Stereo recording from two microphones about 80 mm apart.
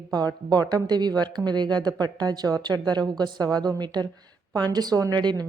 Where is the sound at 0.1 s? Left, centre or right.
Right.